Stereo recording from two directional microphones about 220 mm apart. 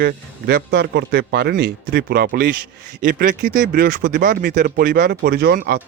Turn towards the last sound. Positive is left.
turn(degrees=-45)  # may be behind; listen again after turning